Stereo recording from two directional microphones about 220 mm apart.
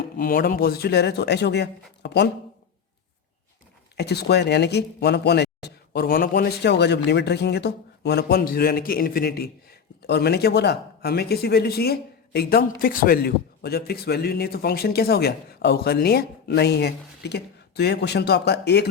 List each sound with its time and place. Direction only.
0.2 s speech: 40° left (ahead or behind)
3.9 s speech: 50° left (ahead or behind)